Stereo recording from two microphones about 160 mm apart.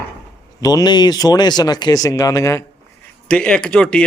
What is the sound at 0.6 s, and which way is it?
Speech, 25° left (ahead or behind).